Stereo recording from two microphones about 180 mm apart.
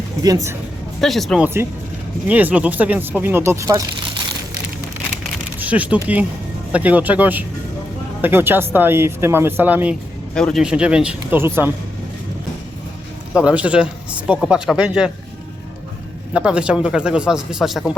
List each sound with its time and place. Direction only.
1.0 s speech: centre (ahead or behind); by 3.8 s 15° right (ahead or behind)
5.5 s speech: 10° right (ahead or behind)
10.3 s speech: 5° left (ahead or behind); by 11.7 s 10° right (ahead or behind)
13.3 s speech: 5° right (ahead or behind)
16.3 s speech: 5° right (ahead or behind)